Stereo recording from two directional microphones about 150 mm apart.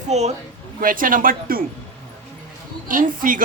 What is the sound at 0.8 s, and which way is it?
Speech, 65° right (ahead or behind).